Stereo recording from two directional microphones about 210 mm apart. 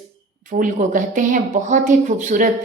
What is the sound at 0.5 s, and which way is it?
A woman's voice, 40° right (ahead or behind).